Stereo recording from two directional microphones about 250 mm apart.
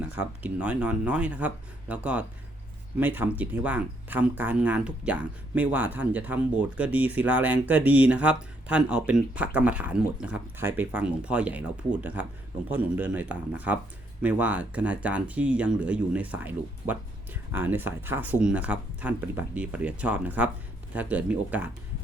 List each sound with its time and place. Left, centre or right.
0.4 s speech: centre